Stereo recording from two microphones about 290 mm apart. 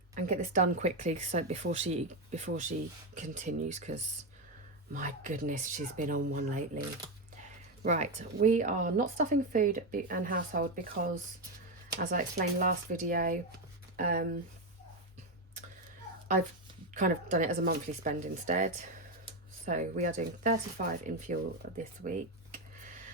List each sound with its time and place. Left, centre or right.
0.1 s speech: right
4.9 s speech: right
7.8 s speech: right
16.9 s speech: right